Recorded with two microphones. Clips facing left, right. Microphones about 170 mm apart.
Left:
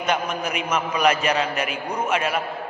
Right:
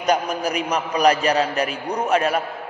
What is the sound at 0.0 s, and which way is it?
A man's voice, 40° right (ahead or behind).